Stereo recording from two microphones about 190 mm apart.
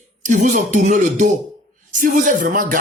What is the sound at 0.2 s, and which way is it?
Speech, 40° right (ahead or behind).